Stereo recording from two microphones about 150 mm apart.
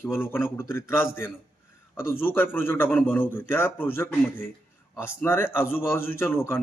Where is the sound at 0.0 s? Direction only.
15° left (ahead or behind).